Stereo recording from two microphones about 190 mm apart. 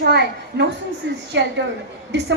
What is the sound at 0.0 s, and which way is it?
A woman's voice, 60° right (ahead or behind).